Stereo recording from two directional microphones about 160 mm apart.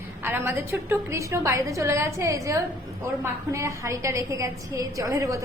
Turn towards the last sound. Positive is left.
turn(degrees=-20)  # may be behind; listen again after turning